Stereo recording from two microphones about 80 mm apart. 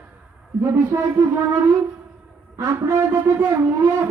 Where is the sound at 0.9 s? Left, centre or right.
Right.